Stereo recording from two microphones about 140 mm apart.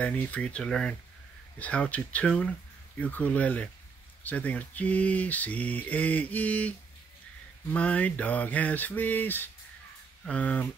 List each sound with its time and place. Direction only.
0.0 s speech: 10° left (ahead or behind)
7.7 s speech: 10° left (ahead or behind)